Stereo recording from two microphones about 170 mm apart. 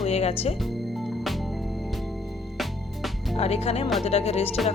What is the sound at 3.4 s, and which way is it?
Speech, 35° left (ahead or behind).